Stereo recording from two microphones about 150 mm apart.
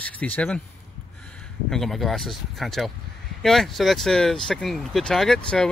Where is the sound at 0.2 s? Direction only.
10° left (ahead or behind).